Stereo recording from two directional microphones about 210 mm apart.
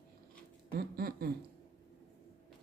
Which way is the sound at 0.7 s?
45° right (ahead or behind).